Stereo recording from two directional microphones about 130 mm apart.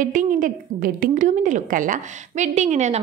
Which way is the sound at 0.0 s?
90° right.